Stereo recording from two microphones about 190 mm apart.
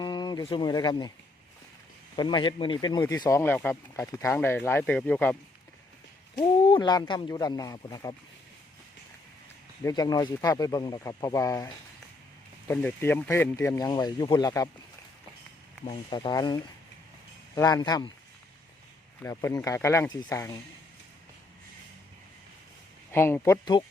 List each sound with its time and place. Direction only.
0.0 s speech: 20° left (ahead or behind)
2.1 s speech: 25° left (ahead or behind)
6.3 s speech: 25° left (ahead or behind)
9.8 s speech: 20° left (ahead or behind)
15.9 s speech: 25° left (ahead or behind)
19.2 s speech: 15° left (ahead or behind)
23.1 s speech: 10° left (ahead or behind)